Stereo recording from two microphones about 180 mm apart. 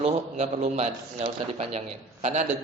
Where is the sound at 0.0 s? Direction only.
35° right (ahead or behind).